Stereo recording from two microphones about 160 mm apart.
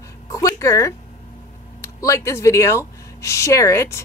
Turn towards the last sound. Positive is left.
turn(degrees=15)  # may be behind; listen again after turning